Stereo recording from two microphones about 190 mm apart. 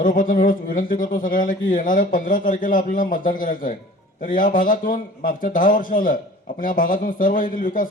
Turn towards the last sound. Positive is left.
turn(degrees=45)  # may be behind; listen again after turning